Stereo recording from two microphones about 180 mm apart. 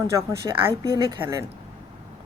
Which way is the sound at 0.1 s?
15° right (ahead or behind).